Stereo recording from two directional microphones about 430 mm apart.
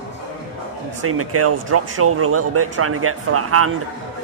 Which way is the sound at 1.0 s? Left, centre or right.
Right.